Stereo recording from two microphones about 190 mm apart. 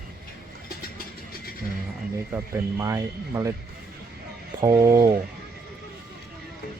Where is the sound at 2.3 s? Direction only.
15° right (ahead or behind).